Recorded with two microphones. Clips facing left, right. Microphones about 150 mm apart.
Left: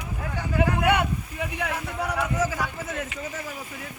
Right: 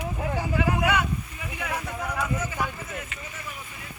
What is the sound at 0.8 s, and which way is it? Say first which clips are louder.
Speech: left 5 dB; 60° left (ahead or behind).